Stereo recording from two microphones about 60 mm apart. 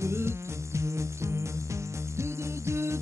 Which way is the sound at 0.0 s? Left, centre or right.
Right.